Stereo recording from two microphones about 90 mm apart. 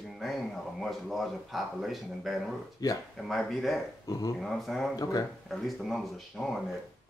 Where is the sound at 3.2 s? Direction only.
Centre (ahead or behind).